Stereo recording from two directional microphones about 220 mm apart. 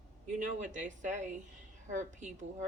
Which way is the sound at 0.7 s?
35° right (ahead or behind).